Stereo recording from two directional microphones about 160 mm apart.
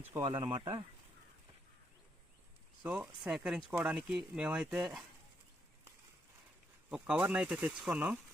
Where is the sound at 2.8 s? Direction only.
10° right (ahead or behind).